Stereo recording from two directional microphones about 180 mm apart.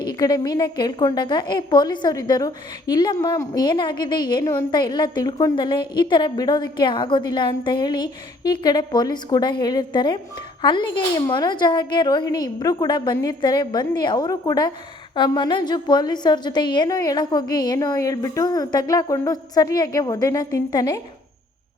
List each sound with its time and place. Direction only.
0.0 s a woman's voice: 20° left (ahead or behind)